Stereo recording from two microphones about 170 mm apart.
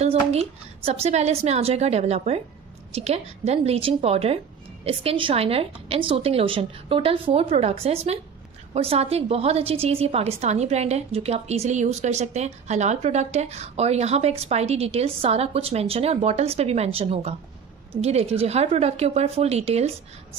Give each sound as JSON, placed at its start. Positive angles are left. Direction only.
{"t": 0.0, "sound": "a woman's voice", "side_deg": -40}